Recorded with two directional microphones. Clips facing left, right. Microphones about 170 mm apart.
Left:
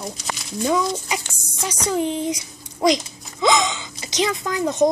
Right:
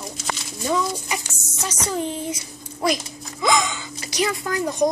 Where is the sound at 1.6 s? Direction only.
10° left (ahead or behind).